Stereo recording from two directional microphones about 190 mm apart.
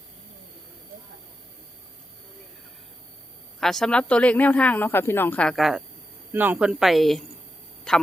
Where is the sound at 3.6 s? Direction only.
Centre (ahead or behind).